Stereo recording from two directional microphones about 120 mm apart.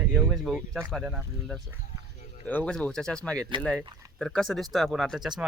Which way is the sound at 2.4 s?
10° left (ahead or behind).